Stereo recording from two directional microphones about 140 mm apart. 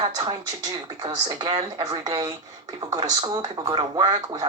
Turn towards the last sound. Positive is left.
turn(degrees=-25)  # may be behind; listen again after turning